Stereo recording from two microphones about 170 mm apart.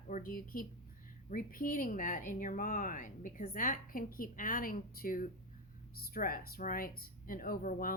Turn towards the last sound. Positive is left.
turn(degrees=55)  # may be behind; listen again after turning